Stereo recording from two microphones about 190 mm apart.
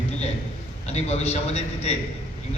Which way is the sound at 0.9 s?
35° left (ahead or behind).